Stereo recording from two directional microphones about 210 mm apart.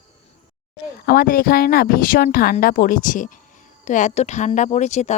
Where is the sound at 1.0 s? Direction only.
45° left (ahead or behind).